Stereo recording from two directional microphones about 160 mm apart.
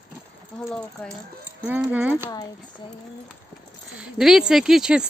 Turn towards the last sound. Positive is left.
turn(degrees=-5)  # may be behind; listen again after turning